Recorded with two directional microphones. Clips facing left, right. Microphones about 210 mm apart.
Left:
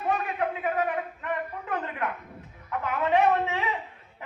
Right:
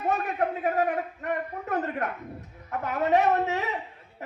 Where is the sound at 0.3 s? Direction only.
45° right (ahead or behind).